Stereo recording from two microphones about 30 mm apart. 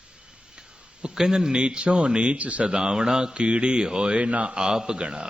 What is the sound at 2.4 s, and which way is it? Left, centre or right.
Speech, right.